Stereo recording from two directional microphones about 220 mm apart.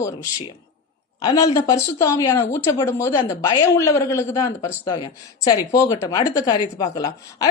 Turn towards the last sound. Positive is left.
turn(degrees=15)  # may be behind; listen again after turning